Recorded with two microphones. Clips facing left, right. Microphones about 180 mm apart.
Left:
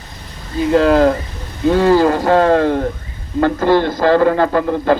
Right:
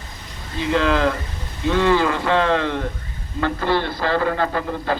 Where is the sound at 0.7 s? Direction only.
40° left (ahead or behind).